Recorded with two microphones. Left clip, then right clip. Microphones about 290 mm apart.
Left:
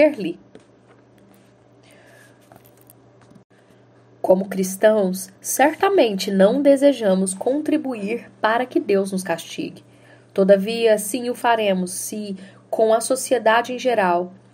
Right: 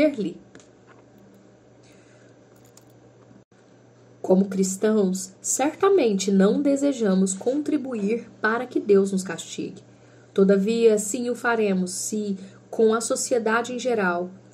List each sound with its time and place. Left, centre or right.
0.0 s a woman's voice: left
4.2 s a woman's voice: left